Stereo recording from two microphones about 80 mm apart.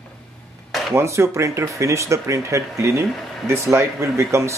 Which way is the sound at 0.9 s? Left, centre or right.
Right.